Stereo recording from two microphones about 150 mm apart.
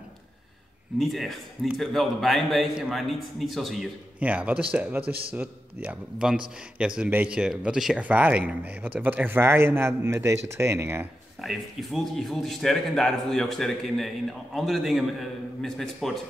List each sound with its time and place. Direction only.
0.9 s a man's voice: centre (ahead or behind); by 11.1 s 15° right (ahead or behind)
11.4 s a man's voice: centre (ahead or behind)